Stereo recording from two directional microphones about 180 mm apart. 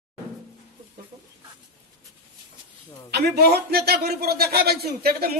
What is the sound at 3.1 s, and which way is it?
A man's voice, 60° right (ahead or behind).